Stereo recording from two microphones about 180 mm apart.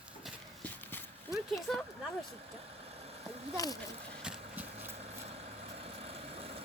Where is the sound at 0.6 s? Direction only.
10° left (ahead or behind).